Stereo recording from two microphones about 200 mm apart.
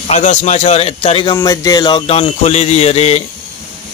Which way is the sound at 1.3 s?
15° left (ahead or behind).